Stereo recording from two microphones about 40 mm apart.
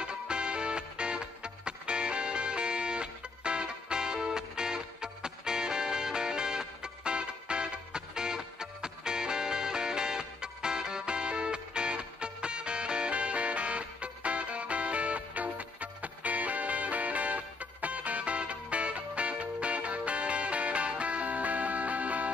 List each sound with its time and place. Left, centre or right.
0.0 s music: right